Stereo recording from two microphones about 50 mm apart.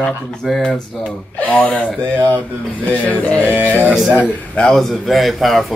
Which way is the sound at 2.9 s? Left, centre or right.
Left.